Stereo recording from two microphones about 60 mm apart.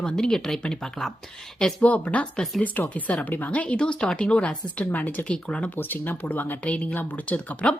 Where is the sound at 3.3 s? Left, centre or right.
Left.